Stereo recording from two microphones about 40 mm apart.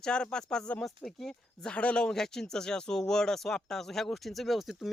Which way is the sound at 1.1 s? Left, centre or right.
Centre.